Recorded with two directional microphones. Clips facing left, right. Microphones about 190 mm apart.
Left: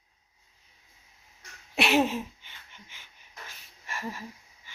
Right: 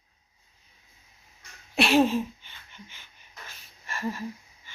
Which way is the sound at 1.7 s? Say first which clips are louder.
Right 3 dB; 20° left (ahead or behind).